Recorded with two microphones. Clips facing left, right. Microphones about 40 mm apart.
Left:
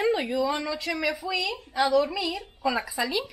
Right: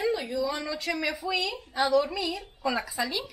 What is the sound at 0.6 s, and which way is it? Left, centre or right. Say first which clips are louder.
A woman's voice: left 2 dB; centre.